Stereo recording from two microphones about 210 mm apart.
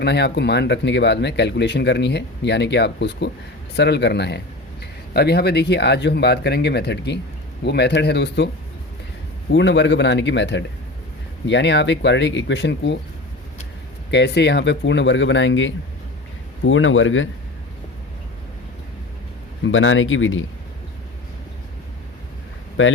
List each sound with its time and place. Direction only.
0.0 s a man's voice: 55° left (ahead or behind)
9.5 s speech: 60° left (ahead or behind)
14.1 s speech: 55° left (ahead or behind)
19.6 s speech: 65° left (ahead or behind)
22.8 s speech: 70° left (ahead or behind)